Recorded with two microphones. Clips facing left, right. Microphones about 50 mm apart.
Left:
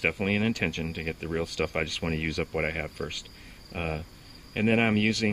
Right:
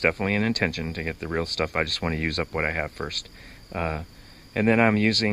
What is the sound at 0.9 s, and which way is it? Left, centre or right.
Speech, right.